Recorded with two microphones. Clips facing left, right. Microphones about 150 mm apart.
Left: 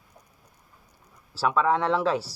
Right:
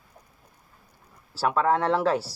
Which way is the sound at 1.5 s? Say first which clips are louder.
Right 1 dB; 40° right (ahead or behind).